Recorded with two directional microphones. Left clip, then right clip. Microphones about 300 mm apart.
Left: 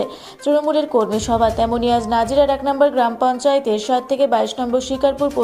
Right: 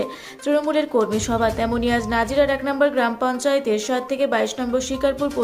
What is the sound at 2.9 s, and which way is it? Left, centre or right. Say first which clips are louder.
Speech: left 4 dB; centre.